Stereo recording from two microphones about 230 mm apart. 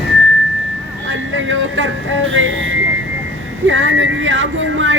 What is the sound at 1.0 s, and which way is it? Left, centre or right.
Vehicle, right.